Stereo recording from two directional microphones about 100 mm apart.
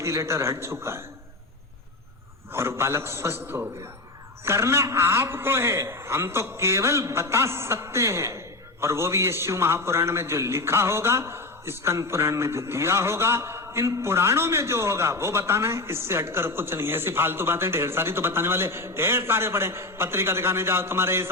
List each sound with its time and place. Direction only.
0.0 s a man's voice: 30° right (ahead or behind)
2.5 s a man's voice: 25° right (ahead or behind)